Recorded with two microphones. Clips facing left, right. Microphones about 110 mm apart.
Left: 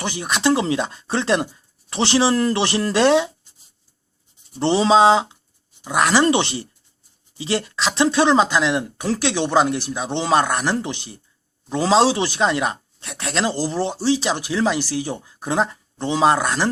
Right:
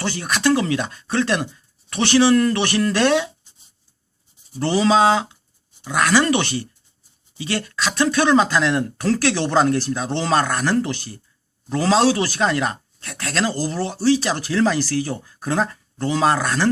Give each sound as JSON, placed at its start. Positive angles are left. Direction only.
{"t": 0.0, "sound": "speech", "side_deg": 15}
{"t": 4.6, "sound": "speech", "side_deg": 25}